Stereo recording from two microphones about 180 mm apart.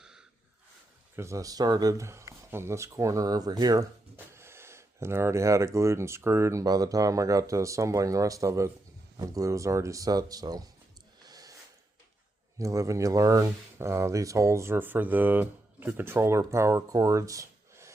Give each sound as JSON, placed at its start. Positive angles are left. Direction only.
{"t": 1.1, "sound": "speech", "side_deg": -15}
{"t": 11.3, "sound": "a sound", "side_deg": -20}
{"t": 12.5, "sound": "speech", "side_deg": -15}